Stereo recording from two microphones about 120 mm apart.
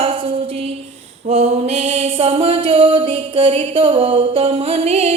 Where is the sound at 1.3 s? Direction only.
65° right (ahead or behind).